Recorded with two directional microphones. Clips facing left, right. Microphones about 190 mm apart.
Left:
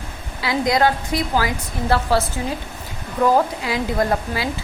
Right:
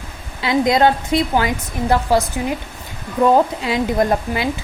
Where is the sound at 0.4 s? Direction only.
20° right (ahead or behind).